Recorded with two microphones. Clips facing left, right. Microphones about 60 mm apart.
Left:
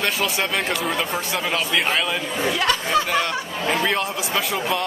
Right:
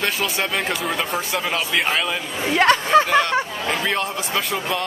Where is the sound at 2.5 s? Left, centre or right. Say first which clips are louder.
Right 8 dB; right.